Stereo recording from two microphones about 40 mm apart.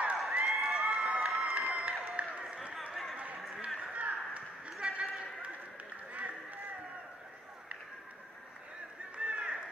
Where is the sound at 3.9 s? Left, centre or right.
Right.